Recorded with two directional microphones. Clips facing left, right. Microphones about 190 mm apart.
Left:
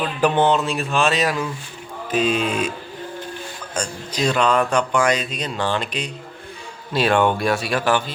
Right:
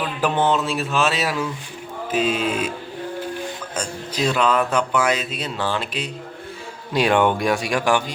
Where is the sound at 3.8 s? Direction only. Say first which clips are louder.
Left 1 dB; 5° right (ahead or behind).